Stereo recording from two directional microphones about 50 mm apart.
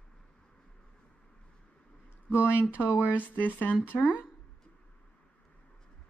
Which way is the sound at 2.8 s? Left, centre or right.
Left.